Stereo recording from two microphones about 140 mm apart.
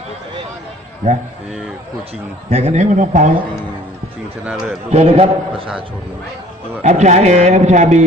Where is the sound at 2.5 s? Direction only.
50° right (ahead or behind).